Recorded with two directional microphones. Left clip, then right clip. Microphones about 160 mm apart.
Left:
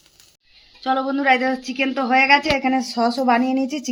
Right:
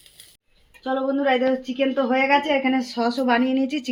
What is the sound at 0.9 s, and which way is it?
Speech, 20° left (ahead or behind).